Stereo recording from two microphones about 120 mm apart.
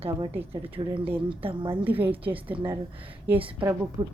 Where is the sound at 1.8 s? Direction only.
15° right (ahead or behind).